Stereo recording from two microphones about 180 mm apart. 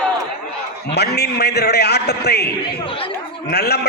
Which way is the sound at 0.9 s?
65° left (ahead or behind).